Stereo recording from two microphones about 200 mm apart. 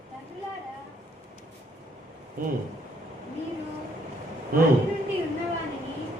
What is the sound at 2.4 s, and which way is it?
Speech, 45° right (ahead or behind).